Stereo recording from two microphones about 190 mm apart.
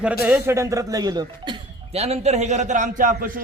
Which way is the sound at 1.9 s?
35° right (ahead or behind).